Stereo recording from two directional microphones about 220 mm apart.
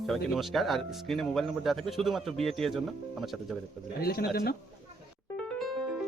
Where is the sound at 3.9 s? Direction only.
45° left (ahead or behind).